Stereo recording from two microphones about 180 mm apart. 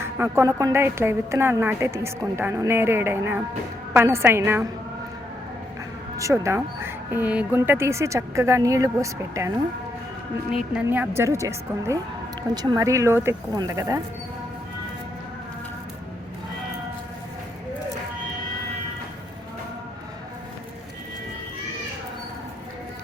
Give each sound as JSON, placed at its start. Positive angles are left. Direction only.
{"t": 0.0, "sound": "a woman's voice", "side_deg": -15}
{"t": 6.1, "sound": "a woman's voice", "side_deg": -15}
{"t": 10.5, "sound": "a woman's voice", "side_deg": -5}